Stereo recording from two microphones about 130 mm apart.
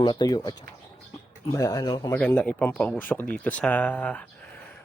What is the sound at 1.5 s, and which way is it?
Speech, 25° left (ahead or behind).